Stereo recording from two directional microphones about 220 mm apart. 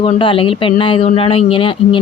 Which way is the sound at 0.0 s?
25° left (ahead or behind).